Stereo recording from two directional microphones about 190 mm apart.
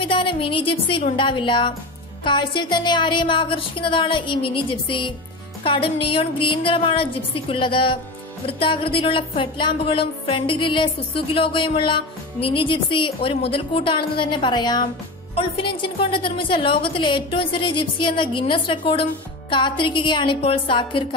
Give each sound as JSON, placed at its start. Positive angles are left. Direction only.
{"t": 0.0, "sound": "speech", "side_deg": 25}